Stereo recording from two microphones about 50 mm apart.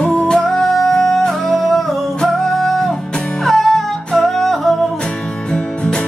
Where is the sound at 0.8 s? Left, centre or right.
Centre.